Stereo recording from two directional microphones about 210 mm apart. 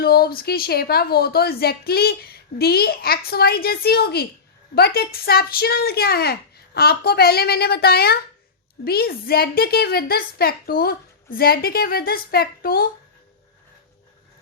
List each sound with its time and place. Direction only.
0.0 s a woman's voice: 45° left (ahead or behind)